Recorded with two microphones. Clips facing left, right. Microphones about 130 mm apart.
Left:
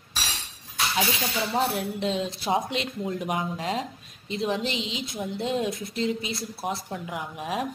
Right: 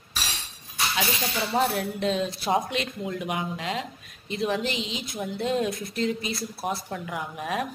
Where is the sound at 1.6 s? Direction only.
15° left (ahead or behind).